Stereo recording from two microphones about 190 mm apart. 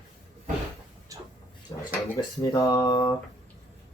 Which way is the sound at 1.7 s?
20° left (ahead or behind).